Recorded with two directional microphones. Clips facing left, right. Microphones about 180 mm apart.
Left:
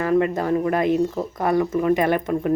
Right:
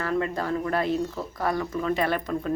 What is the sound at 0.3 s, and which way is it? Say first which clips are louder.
Speech: left 6 dB; 20° left (ahead or behind).